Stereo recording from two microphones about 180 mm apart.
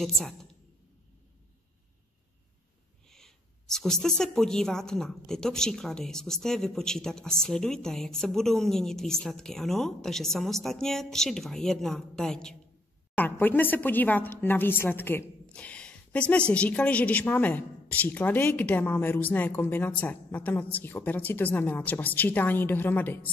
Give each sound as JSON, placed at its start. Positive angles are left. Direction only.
{"t": 0.0, "sound": "a woman's voice", "side_deg": 0}
{"t": 3.1, "sound": "a woman's voice", "side_deg": 0}